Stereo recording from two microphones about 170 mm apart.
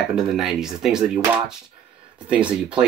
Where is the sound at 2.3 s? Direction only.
5° right (ahead or behind).